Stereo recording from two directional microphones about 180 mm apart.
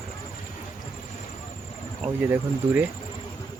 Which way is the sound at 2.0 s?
10° right (ahead or behind).